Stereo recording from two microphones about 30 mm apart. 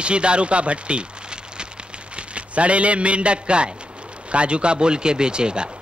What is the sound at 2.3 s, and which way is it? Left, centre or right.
A man's voice, right.